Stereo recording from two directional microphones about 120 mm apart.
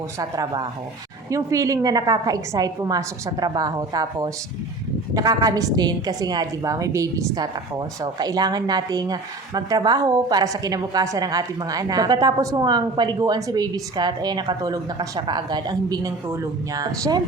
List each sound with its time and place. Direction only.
0.2 s a woman's voice: 35° right (ahead or behind)